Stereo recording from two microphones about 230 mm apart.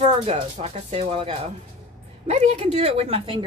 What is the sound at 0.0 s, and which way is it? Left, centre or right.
A woman's voice, right.